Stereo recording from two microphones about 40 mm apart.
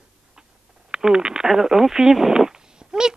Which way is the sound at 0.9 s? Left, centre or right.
Centre.